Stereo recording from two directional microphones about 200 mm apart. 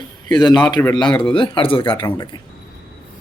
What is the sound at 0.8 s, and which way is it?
Speech, 15° left (ahead or behind).